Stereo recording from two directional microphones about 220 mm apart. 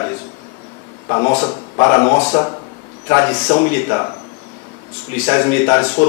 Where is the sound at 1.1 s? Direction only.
25° left (ahead or behind).